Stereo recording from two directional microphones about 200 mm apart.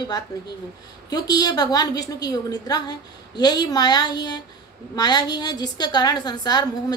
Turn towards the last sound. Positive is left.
turn(degrees=20)  # may be behind; listen again after turning